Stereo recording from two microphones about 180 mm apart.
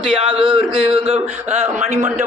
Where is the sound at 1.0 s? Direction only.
35° right (ahead or behind).